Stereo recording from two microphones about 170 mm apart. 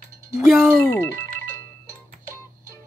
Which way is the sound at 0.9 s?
15° left (ahead or behind).